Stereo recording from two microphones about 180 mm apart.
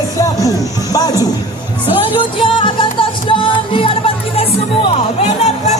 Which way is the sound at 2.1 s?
25° left (ahead or behind).